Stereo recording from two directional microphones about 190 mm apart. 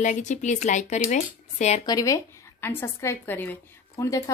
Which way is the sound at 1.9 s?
20° left (ahead or behind).